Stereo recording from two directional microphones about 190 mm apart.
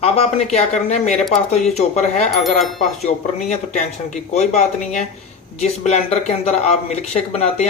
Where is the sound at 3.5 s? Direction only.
40° left (ahead or behind).